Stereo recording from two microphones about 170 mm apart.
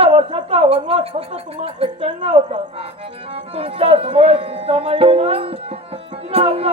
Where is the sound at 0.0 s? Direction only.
35° right (ahead or behind).